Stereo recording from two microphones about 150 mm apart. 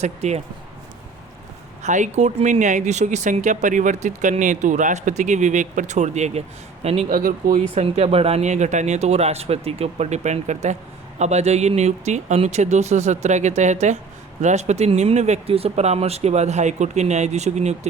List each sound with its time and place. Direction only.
0.0 s speech: 45° right (ahead or behind)
1.8 s speech: 50° right (ahead or behind)
7.1 s speech: 70° right (ahead or behind)
7.5 s speech: 45° right (ahead or behind)